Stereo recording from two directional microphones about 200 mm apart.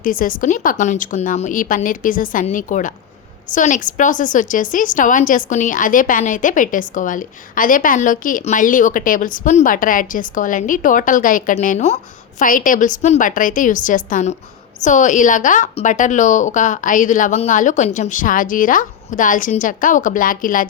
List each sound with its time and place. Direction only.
0.0 s a woman's voice: 45° left (ahead or behind)